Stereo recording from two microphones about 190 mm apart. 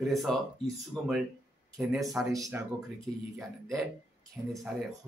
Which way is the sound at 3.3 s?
Centre (ahead or behind).